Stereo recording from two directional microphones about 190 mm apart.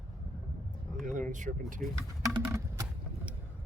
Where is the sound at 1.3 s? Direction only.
40° right (ahead or behind).